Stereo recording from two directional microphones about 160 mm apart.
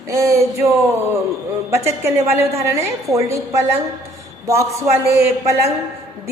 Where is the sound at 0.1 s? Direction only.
20° right (ahead or behind).